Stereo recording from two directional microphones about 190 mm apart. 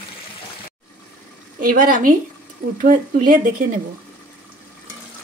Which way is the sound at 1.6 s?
45° right (ahead or behind).